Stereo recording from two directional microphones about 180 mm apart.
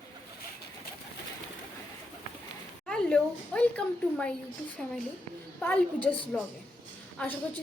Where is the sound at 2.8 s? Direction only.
5° left (ahead or behind).